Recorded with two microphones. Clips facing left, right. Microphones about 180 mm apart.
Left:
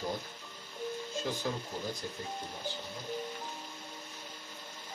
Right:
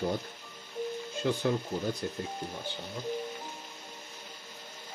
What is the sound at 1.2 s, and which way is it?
Speech, 60° right (ahead or behind).